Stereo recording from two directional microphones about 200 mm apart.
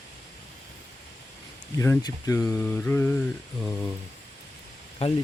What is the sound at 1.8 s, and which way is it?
Speech, 15° left (ahead or behind).